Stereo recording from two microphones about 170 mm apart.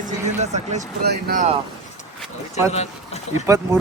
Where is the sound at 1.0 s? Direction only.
70° right (ahead or behind).